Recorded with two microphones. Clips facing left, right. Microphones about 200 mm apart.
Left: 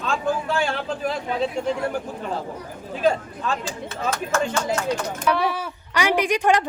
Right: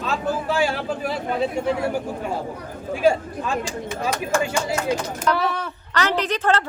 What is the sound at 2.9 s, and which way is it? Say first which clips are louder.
Speech: right 3 dB; 10° right (ahead or behind).